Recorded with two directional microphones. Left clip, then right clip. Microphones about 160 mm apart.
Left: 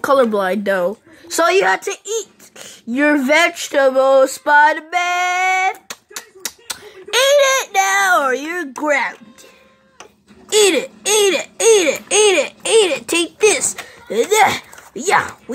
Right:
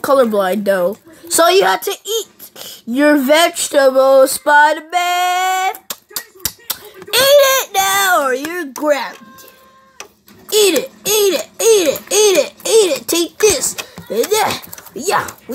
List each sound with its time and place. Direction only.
0.0 s speech: 5° right (ahead or behind)
10.5 s speech: 10° right (ahead or behind)